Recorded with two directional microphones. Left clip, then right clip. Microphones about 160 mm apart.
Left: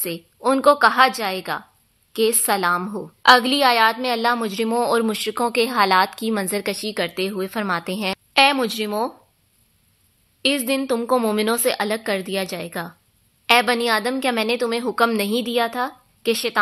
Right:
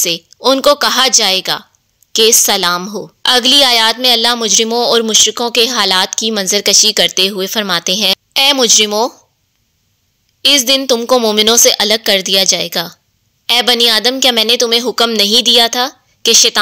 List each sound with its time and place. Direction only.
0.0 s a woman's voice: 30° right (ahead or behind)
10.4 s a woman's voice: 35° right (ahead or behind)